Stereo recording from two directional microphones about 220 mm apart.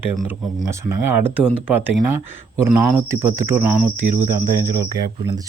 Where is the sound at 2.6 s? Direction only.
10° right (ahead or behind).